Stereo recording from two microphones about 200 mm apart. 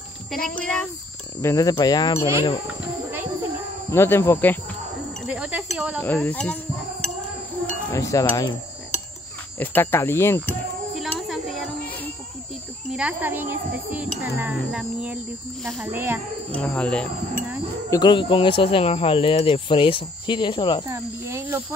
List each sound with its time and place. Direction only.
0.3 s speech: 5° left (ahead or behind)
1.4 s speech: 15° left (ahead or behind)
3.9 s speech: 10° left (ahead or behind)
5.2 s a sound: 5° right (ahead or behind)
5.9 s a sound: 10° left (ahead or behind)
9.6 s speech: 10° left (ahead or behind)
11.0 s child singing: centre (ahead or behind)
12.9 s a child's voice: 5° right (ahead or behind)
16.5 s speech: 5° left (ahead or behind)
17.8 s speech: 20° left (ahead or behind)
20.8 s a child's voice: 15° right (ahead or behind)